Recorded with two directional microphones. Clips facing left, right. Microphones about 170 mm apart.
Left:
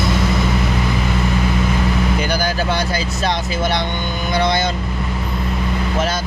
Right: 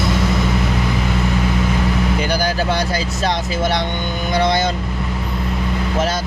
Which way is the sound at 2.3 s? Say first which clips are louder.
Right 1 dB; 35° right (ahead or behind).